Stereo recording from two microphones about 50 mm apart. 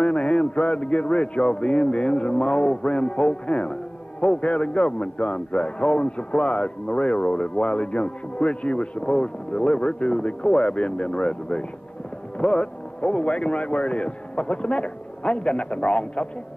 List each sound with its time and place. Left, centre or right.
0.0 s a man's voice: left